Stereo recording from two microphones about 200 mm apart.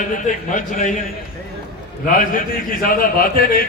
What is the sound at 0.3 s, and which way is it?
Speech, 40° left (ahead or behind).